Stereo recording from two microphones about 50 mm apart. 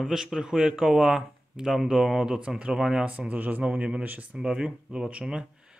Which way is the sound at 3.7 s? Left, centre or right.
Right.